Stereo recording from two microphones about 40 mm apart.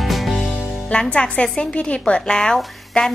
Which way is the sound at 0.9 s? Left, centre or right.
Left.